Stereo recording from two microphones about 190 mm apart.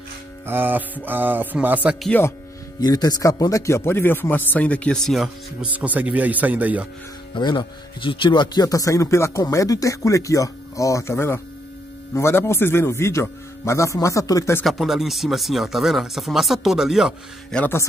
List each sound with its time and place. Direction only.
0.5 s music: 10° right (ahead or behind)
2.0 s a man's voice: 10° left (ahead or behind)
2.8 s a man's voice: 20° left (ahead or behind); by 6.9 s 10° right (ahead or behind)
7.3 s a man's voice: 25° left (ahead or behind)
14.6 s speech: centre (ahead or behind)